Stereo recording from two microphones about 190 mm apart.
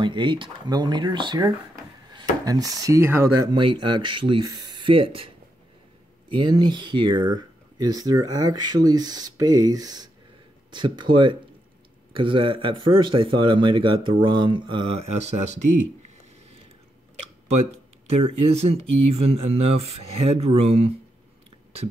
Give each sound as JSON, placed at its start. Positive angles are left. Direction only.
{"t": 0.0, "sound": "speech", "side_deg": -25}
{"t": 3.5, "sound": "speech", "side_deg": -25}
{"t": 18.2, "sound": "speech", "side_deg": -30}